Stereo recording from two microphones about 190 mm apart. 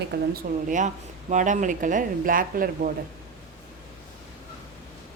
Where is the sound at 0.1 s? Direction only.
60° right (ahead or behind).